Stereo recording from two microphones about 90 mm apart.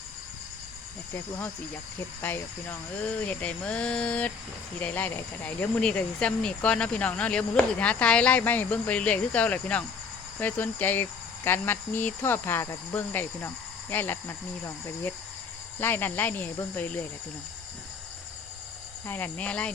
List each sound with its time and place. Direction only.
2.2 s speech: 20° left (ahead or behind)
19.0 s speech: 20° left (ahead or behind)